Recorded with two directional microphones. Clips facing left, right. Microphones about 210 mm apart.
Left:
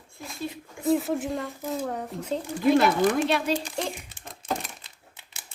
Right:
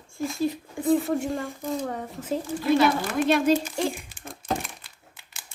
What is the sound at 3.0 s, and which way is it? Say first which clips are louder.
Speech: left 3 dB; 20° left (ahead or behind).